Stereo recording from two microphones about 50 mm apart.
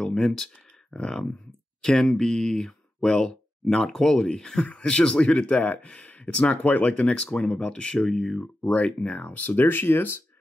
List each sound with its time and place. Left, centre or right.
0.0 s speech: centre
8.6 s speech: left
9.1 s speech: left